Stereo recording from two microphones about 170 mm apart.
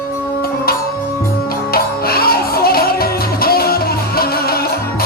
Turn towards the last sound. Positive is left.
turn(degrees=65)  # may be behind; listen again after turning